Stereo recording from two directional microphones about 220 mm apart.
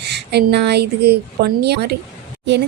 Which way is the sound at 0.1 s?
50° right (ahead or behind).